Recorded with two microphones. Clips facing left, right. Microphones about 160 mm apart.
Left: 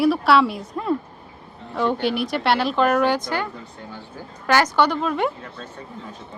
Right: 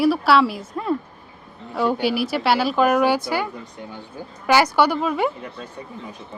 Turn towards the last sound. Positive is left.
turn(degrees=-5)  # may be behind; listen again after turning